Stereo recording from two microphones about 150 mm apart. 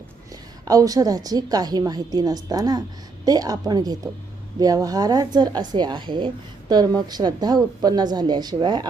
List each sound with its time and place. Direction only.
0.6 s speech: 25° right (ahead or behind)